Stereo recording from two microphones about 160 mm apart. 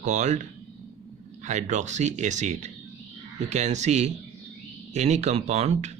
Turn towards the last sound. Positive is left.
turn(degrees=-45)  # may be behind; listen again after turning